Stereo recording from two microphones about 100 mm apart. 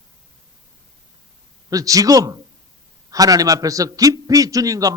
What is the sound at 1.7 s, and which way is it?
A man's voice, 35° right (ahead or behind).